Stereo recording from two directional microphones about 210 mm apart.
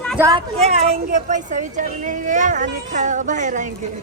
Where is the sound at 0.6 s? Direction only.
30° right (ahead or behind).